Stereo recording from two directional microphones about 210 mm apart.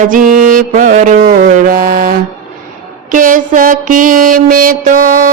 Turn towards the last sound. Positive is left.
turn(degrees=-40)  # may be behind; listen again after turning